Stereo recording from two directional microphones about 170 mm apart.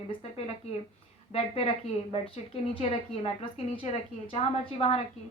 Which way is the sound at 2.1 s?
35° left (ahead or behind).